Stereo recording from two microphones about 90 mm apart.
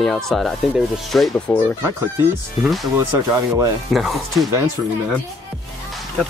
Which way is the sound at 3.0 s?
30° right (ahead or behind).